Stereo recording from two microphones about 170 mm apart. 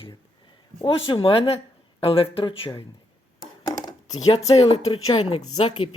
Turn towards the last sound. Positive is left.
turn(degrees=35)  # may be behind; listen again after turning